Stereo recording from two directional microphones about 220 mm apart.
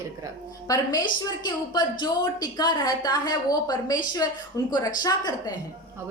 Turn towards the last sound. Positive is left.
turn(degrees=15)  # may be behind; listen again after turning